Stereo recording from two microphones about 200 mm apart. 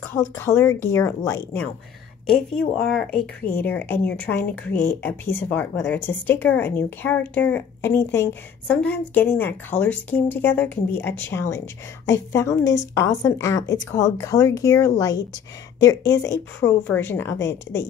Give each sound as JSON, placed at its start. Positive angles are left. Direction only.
{"t": 0.1, "sound": "speech", "side_deg": 15}